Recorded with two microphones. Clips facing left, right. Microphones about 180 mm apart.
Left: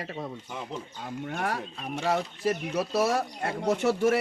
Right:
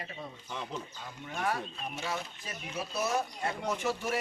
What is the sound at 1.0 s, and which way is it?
Speech, 60° left (ahead or behind).